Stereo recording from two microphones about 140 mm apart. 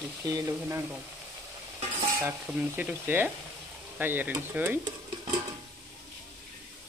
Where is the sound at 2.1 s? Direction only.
15° right (ahead or behind).